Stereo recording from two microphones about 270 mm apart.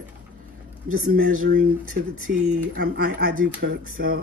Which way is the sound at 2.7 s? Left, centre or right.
Right.